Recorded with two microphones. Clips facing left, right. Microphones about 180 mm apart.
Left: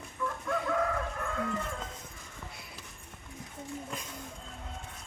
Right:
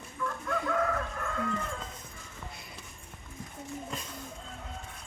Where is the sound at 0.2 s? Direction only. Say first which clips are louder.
Even; 15° left (ahead or behind).